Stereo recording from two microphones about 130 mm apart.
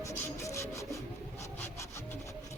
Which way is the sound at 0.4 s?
20° left (ahead or behind).